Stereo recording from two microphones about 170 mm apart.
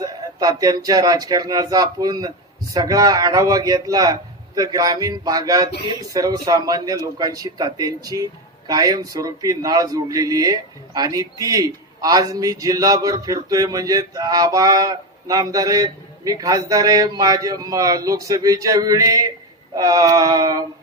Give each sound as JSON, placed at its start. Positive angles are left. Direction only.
{"t": 0.0, "sound": "a man's voice", "side_deg": -20}